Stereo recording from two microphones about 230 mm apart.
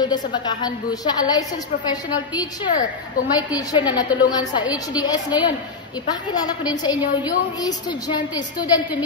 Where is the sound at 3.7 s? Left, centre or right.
Centre.